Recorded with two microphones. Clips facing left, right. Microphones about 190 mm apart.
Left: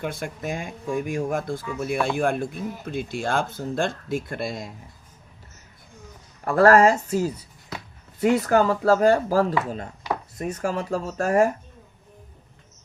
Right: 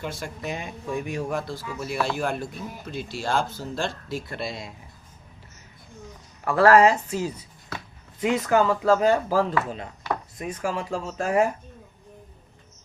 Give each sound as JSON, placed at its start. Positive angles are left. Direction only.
{"t": 0.0, "sound": "speech", "side_deg": 55}
{"t": 6.4, "sound": "speech", "side_deg": 40}
{"t": 8.4, "sound": "speech", "side_deg": 45}